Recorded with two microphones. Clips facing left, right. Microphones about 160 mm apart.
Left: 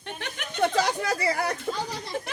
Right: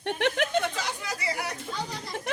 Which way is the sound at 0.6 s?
40° left (ahead or behind).